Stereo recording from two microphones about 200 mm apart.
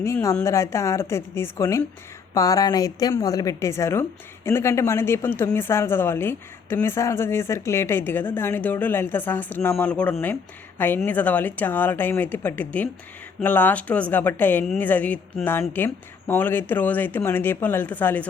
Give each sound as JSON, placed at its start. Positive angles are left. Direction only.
{"t": 0.0, "sound": "speech", "side_deg": 15}